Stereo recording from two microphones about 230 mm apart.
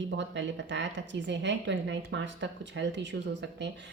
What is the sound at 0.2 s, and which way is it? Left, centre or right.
A woman's voice, right.